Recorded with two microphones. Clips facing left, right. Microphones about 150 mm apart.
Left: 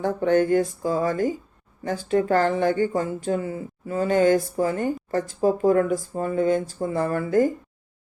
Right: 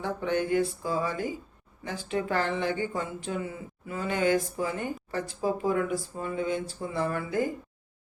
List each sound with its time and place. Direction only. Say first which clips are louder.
0.0 s speech: left 8 dB; 45° left (ahead or behind)